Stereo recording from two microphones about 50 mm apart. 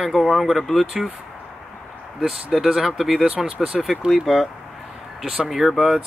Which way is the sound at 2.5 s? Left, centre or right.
Centre.